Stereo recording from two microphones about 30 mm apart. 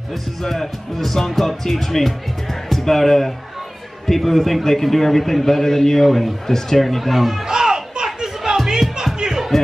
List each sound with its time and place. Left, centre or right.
0.4 s speech: centre
6.0 s speech: centre
6.4 s speech: centre
7.4 s crowd: right
9.2 s music: centre